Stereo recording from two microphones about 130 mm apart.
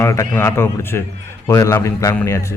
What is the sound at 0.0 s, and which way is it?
A man's voice, 20° left (ahead or behind).